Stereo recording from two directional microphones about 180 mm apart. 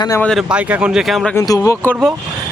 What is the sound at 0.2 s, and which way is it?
A man's voice, centre (ahead or behind).